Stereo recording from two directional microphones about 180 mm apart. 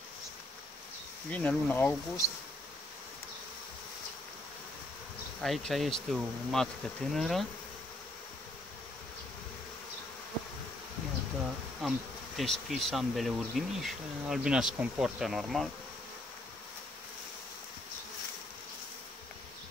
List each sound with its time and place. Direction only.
1.3 s speech: 10° left (ahead or behind)
5.4 s speech: centre (ahead or behind)
11.8 s speech: centre (ahead or behind)